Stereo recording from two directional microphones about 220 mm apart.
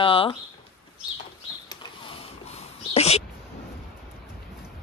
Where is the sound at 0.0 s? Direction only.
25° left (ahead or behind).